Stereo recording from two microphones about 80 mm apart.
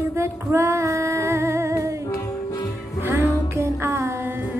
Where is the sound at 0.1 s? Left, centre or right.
Right.